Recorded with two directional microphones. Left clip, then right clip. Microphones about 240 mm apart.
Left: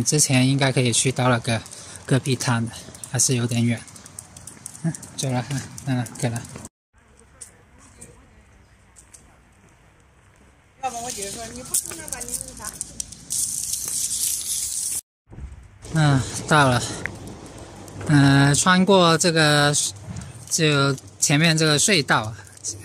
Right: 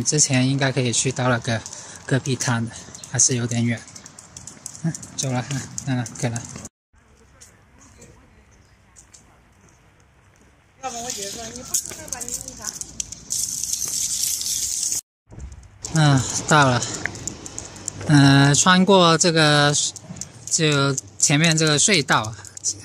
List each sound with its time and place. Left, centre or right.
0.0 s speech: centre
4.8 s speech: centre
12.9 s a sound: centre
15.9 s speech: centre